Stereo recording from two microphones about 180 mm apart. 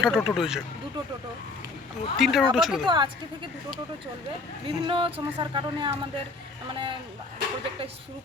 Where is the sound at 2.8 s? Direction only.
25° right (ahead or behind).